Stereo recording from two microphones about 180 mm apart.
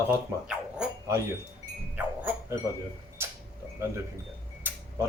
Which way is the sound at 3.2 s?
15° right (ahead or behind).